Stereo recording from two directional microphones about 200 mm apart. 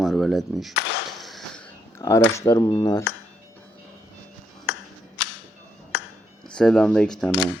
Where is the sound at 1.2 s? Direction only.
Centre (ahead or behind).